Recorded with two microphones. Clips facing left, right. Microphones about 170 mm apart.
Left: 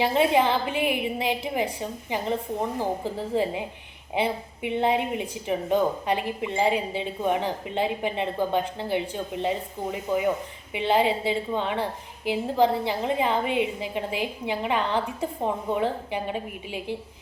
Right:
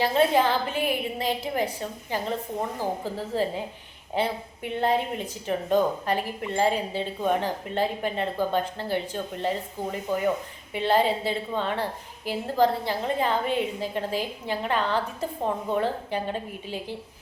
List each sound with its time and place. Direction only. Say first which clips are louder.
0.0 s a woman's voice: even; 15° left (ahead or behind)
10.7 s a woman's voice: even; 15° left (ahead or behind)